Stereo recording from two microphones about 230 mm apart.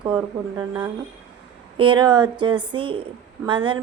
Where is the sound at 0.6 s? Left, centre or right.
Centre.